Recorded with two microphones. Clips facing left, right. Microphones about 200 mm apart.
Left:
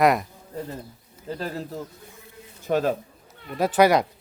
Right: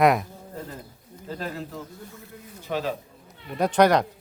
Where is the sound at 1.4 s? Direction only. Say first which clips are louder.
Left 2 dB; 35° left (ahead or behind).